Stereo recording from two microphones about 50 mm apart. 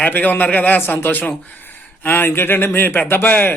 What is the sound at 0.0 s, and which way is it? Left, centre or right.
A man's voice, left.